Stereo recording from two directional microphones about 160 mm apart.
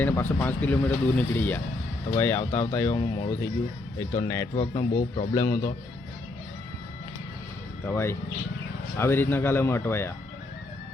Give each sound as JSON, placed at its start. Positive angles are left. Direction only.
{"t": 0.0, "sound": "speech", "side_deg": 10}
{"t": 4.1, "sound": "a man's voice", "side_deg": 15}
{"t": 7.9, "sound": "speech", "side_deg": 15}